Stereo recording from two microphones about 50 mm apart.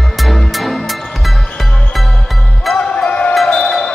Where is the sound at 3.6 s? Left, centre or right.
Centre.